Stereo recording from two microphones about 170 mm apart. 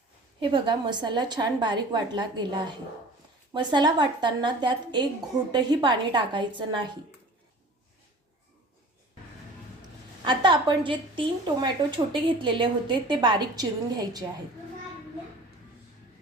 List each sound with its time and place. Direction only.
0.3 s a woman's voice: 30° right (ahead or behind)
10.2 s a woman's voice: 25° right (ahead or behind)